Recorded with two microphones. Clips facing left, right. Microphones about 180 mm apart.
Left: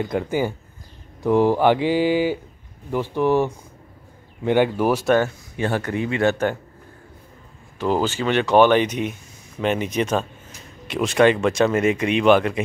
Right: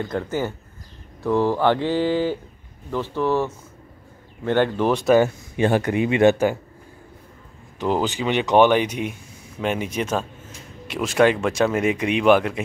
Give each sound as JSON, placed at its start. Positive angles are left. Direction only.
{"t": 0.0, "sound": "speech", "side_deg": 15}
{"t": 5.2, "sound": "speech", "side_deg": -15}
{"t": 7.8, "sound": "speech", "side_deg": -15}